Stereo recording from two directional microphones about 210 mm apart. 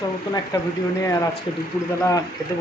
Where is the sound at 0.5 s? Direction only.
20° left (ahead or behind).